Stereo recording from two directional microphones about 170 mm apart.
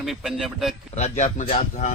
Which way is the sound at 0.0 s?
Centre (ahead or behind).